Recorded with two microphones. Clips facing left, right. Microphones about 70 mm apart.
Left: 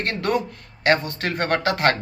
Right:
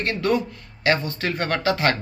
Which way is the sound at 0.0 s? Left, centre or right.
Left.